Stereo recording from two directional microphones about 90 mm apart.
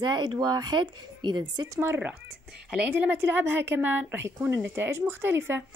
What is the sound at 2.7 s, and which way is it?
A woman's voice, 15° right (ahead or behind).